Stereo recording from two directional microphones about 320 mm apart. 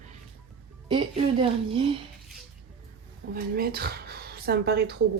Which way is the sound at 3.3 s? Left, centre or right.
Right.